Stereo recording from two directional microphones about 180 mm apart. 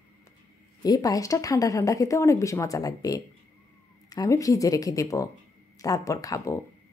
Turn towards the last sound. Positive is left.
turn(degrees=20)  # may be behind; listen again after turning